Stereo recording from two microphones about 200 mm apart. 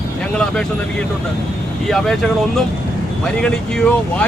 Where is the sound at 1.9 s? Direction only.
Centre (ahead or behind).